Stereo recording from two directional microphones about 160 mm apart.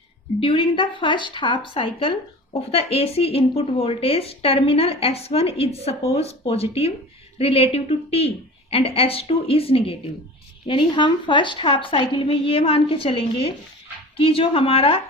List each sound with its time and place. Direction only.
0.3 s speech: 35° left (ahead or behind)